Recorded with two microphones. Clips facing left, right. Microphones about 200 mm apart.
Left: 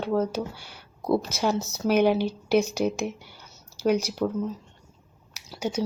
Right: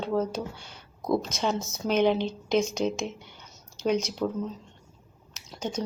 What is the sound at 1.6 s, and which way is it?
Speech, 65° left (ahead or behind).